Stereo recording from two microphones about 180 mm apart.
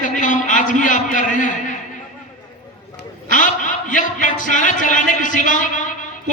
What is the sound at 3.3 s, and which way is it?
A man's voice, 45° left (ahead or behind).